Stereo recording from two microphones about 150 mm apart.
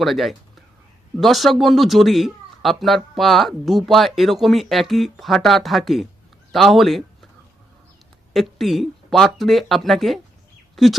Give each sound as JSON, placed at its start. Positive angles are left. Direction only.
{"t": 0.0, "sound": "speech", "side_deg": 0}
{"t": 8.3, "sound": "speech", "side_deg": 0}